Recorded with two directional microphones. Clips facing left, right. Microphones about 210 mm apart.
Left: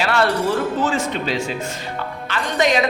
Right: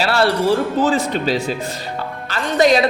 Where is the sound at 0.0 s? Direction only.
35° right (ahead or behind).